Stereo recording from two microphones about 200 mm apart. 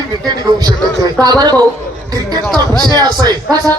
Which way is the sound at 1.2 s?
20° right (ahead or behind).